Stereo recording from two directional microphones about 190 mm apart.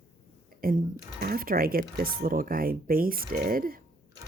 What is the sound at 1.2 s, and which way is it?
Speech, 50° right (ahead or behind).